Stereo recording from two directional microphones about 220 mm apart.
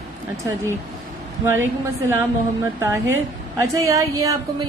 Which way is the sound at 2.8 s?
10° right (ahead or behind).